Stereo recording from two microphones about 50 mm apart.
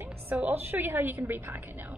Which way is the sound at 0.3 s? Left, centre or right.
Right.